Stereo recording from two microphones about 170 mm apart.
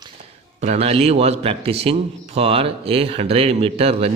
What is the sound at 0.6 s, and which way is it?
A man's voice, 40° right (ahead or behind).